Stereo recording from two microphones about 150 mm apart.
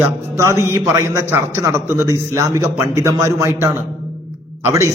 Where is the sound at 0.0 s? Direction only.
20° right (ahead or behind).